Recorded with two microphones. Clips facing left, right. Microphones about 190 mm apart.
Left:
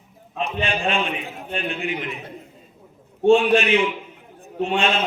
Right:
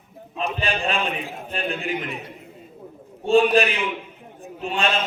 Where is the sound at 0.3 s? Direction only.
35° right (ahead or behind).